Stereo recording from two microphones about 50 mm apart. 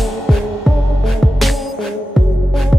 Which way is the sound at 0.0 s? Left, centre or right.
Centre.